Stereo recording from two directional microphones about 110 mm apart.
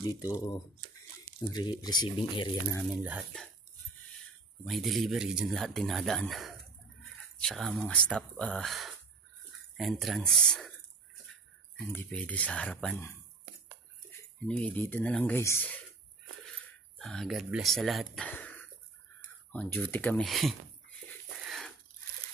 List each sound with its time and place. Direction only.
0.0 s speech: 35° left (ahead or behind)
2.9 s speech: 10° right (ahead or behind)
4.6 s speech: centre (ahead or behind)
11.9 s speech: 10° left (ahead or behind)
14.5 s speech: 10° left (ahead or behind)
17.0 s speech: 5° left (ahead or behind)
18.2 s a sound: 15° left (ahead or behind)
19.5 s speech: 15° left (ahead or behind)
20.2 s speech: centre (ahead or behind)
21.5 s a sound: centre (ahead or behind)